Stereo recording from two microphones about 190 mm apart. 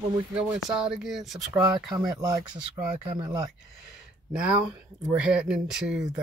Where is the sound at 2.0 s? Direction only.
20° right (ahead or behind).